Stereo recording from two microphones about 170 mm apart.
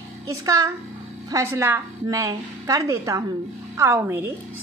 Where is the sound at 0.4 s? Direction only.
20° right (ahead or behind).